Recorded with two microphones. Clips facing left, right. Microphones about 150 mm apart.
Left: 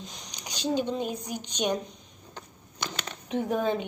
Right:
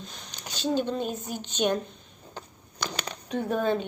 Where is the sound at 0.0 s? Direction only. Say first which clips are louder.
Even; 15° left (ahead or behind).